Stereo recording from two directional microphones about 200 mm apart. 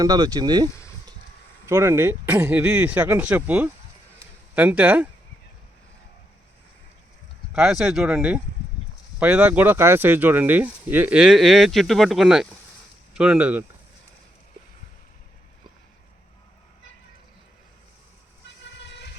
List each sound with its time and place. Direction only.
0.0 s speech: 20° right (ahead or behind)
7.5 s speech: centre (ahead or behind)